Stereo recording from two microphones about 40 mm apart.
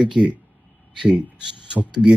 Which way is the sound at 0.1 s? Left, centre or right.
Right.